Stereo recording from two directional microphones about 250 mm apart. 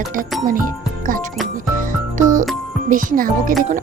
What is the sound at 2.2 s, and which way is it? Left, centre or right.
Music, right.